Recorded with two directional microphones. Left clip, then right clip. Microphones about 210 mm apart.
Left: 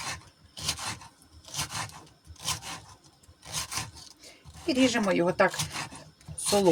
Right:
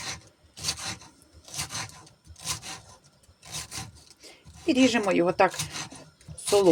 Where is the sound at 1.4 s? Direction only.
5° left (ahead or behind).